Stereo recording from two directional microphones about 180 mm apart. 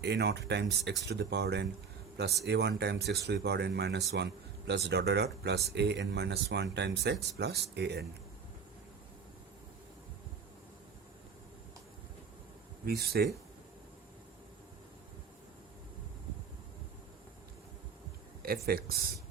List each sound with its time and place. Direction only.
0.0 s speech: 65° right (ahead or behind)
12.8 s speech: 60° right (ahead or behind)
18.4 s speech: 60° right (ahead or behind)